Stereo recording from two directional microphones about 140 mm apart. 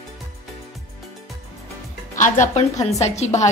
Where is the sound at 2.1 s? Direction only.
65° left (ahead or behind).